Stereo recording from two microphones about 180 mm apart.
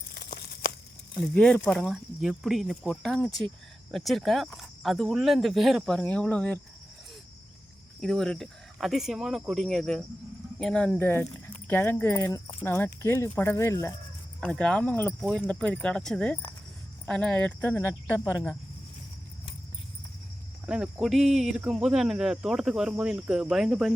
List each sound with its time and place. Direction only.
0.1 s tearing: 60° left (ahead or behind)
1.2 s speech: 5° left (ahead or behind)
8.0 s speech: centre (ahead or behind)
14.4 s speech: 5° left (ahead or behind)
20.7 s speech: 5° right (ahead or behind)